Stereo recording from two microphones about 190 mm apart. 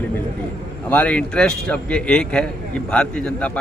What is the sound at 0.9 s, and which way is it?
A man's voice, 5° left (ahead or behind).